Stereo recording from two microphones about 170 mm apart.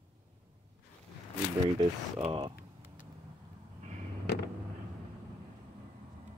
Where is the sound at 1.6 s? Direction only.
35° right (ahead or behind).